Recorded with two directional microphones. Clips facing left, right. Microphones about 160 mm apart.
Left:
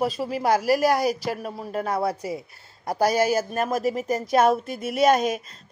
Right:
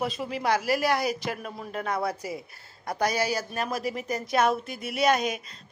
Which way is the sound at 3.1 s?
50° left (ahead or behind).